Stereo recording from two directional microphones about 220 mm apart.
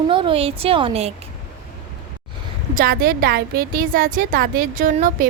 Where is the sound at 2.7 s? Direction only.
45° right (ahead or behind).